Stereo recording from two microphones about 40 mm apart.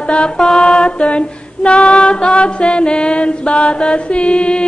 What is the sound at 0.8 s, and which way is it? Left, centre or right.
Female singing, left.